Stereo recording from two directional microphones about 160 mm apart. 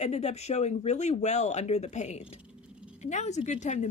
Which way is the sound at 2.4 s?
5° right (ahead or behind).